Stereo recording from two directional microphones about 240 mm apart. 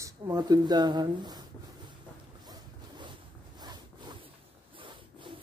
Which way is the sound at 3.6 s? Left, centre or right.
Centre.